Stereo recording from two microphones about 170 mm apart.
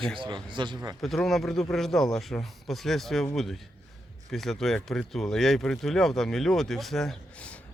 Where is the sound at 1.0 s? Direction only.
Centre (ahead or behind).